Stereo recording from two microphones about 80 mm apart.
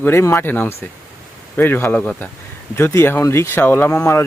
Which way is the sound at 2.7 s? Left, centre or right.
Left.